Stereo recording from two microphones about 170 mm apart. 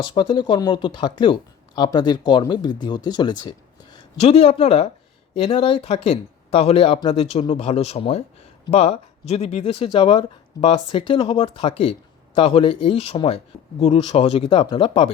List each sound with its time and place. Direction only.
0.0 s speech: 25° left (ahead or behind)